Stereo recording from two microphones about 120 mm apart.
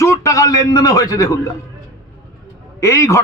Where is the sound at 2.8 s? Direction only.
25° left (ahead or behind).